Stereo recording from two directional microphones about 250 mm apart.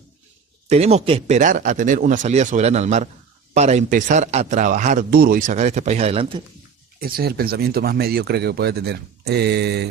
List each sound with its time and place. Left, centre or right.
0.7 s a man's voice: right
7.0 s speech: right